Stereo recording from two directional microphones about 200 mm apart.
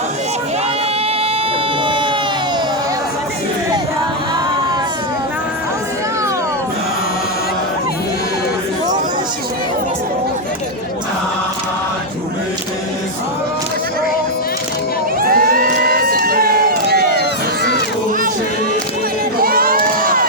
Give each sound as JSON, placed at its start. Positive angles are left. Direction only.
{"t": 15.2, "sound": "crowd", "side_deg": -45}
{"t": 19.4, "sound": "crowd", "side_deg": -45}